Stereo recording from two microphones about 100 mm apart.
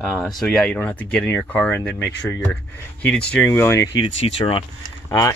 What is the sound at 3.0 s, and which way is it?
Speech, 15° left (ahead or behind).